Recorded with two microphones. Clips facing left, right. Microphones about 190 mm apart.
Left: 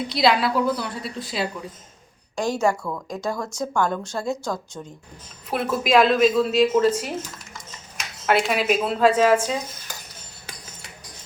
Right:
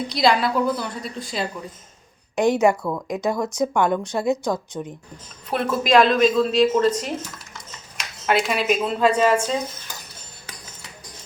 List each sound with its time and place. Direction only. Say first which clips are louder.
0.1 s speech: even; centre (ahead or behind)
2.3 s speech: right 5 dB; 20° right (ahead or behind)
5.5 s speech: right 1 dB; 5° left (ahead or behind)
8.3 s speech: even; 5° left (ahead or behind)